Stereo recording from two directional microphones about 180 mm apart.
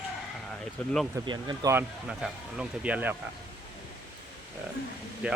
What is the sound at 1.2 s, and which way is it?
Speech, 25° right (ahead or behind).